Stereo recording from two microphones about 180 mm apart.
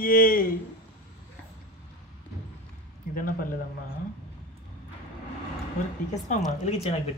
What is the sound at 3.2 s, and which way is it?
Speech, 50° left (ahead or behind).